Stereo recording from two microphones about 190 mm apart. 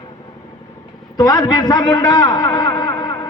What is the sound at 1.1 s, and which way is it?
A man's voice, 20° left (ahead or behind).